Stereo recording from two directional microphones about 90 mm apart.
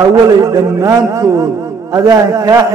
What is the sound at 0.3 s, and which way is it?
A man's voice, 40° right (ahead or behind).